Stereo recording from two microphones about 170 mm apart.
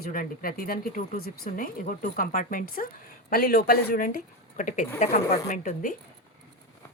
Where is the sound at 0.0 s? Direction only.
60° left (ahead or behind).